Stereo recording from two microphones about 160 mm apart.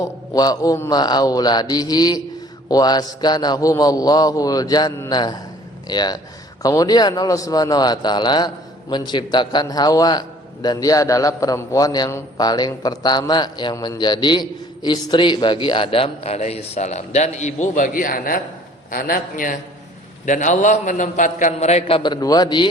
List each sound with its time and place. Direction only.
0.0 s a man's voice: 25° left (ahead or behind)